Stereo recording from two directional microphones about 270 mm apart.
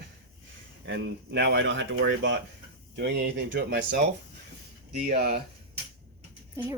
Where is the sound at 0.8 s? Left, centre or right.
Right.